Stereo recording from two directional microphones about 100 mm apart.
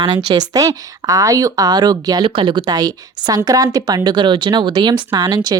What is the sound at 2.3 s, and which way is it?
Speech, 60° right (ahead or behind).